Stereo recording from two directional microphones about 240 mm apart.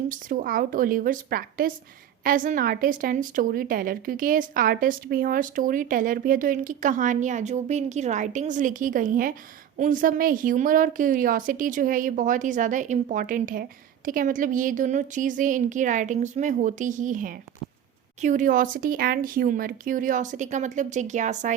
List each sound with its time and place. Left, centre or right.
0.1 s a woman's voice: right